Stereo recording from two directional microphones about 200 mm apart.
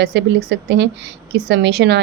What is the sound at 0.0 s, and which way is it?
A woman's voice, 60° right (ahead or behind).